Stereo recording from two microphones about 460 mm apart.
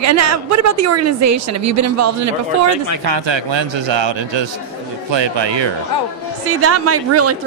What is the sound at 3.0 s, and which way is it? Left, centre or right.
A man's voice, right.